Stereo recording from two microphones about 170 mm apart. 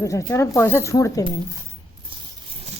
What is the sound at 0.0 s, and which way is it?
Speech, 20° left (ahead or behind).